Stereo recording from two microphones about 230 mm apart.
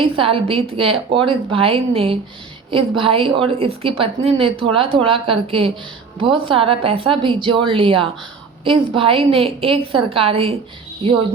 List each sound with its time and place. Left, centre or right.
0.0 s a woman's voice: right